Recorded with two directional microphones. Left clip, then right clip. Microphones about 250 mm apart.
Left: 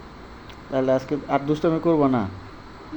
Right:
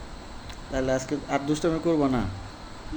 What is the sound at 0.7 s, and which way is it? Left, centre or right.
Speech, centre.